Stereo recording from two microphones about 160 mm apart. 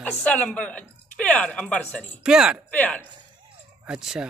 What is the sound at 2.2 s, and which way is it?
Speech, 5° right (ahead or behind).